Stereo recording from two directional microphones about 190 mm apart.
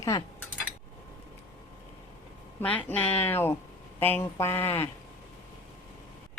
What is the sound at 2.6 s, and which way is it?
Speech, 10° left (ahead or behind).